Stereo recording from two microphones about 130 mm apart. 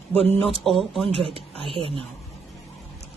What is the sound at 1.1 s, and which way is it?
Speech, 45° right (ahead or behind).